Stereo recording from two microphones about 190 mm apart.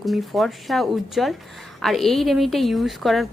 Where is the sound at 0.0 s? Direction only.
Centre (ahead or behind).